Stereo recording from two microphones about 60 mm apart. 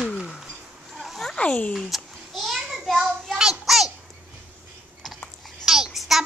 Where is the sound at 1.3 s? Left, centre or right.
Centre.